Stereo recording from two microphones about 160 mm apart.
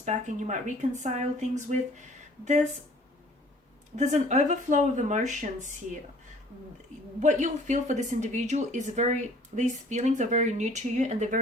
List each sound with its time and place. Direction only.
0.0 s speech: 45° right (ahead or behind)
3.9 s speech: 45° right (ahead or behind)
7.2 s speech: 50° right (ahead or behind)